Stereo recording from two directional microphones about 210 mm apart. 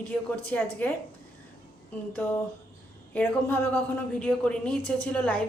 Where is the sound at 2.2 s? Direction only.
10° left (ahead or behind).